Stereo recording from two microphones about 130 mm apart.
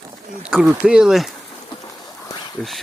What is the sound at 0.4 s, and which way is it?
Speech, 5° right (ahead or behind).